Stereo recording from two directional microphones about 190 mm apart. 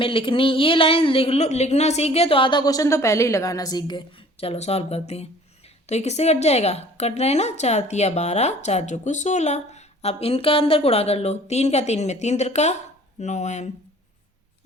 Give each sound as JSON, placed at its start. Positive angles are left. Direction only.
{"t": 0.0, "sound": "a woman's voice", "side_deg": 25}